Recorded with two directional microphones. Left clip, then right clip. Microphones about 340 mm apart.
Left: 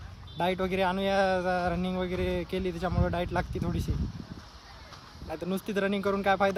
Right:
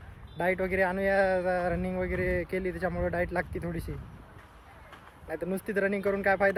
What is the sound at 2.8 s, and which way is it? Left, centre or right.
Speech, centre.